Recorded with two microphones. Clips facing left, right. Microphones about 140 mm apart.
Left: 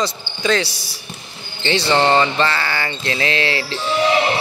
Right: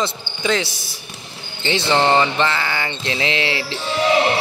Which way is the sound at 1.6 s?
15° right (ahead or behind).